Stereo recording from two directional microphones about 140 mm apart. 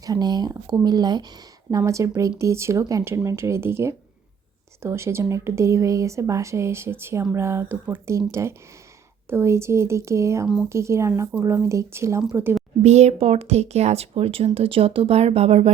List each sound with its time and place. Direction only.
0.0 s a woman's voice: 25° right (ahead or behind)
12.8 s speech: 50° right (ahead or behind)